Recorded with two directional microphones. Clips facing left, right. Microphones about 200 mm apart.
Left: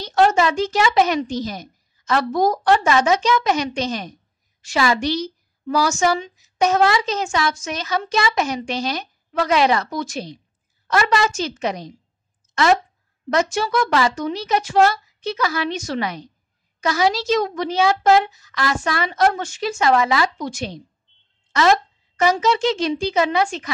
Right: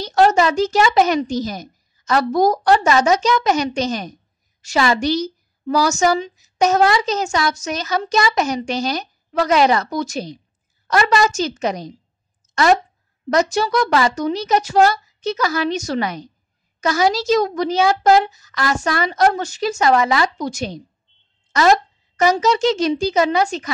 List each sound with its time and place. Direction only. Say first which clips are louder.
0.0 s a woman's voice: right 2 dB; 40° right (ahead or behind)
13.3 s a woman's voice: right 3 dB; 40° right (ahead or behind)